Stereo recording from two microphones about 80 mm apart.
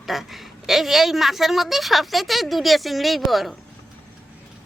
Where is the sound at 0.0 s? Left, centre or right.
Centre.